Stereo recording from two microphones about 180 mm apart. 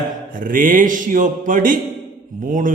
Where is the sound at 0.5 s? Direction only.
50° right (ahead or behind).